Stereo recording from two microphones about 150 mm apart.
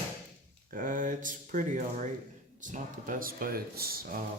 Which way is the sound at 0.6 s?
65° right (ahead or behind).